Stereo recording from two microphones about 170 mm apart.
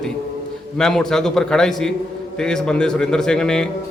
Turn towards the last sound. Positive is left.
turn(degrees=5)  # may be behind; listen again after turning